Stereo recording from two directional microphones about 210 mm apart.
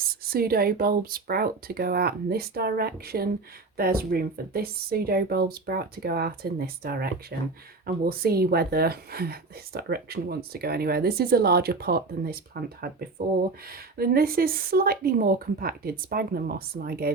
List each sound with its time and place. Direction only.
0.1 s speech: 45° right (ahead or behind)